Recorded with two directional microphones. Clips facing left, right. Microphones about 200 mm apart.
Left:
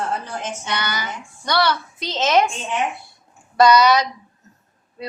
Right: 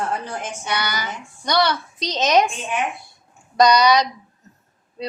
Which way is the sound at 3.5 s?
15° right (ahead or behind).